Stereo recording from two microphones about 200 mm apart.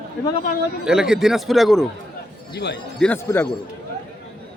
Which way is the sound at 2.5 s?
55° left (ahead or behind).